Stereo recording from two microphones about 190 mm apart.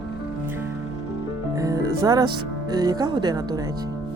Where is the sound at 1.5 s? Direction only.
20° right (ahead or behind).